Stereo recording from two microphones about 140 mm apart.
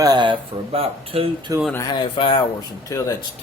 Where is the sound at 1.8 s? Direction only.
35° left (ahead or behind).